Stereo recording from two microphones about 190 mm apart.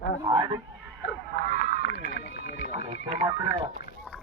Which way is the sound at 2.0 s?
60° left (ahead or behind).